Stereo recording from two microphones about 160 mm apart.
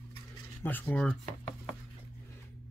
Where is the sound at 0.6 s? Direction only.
10° left (ahead or behind).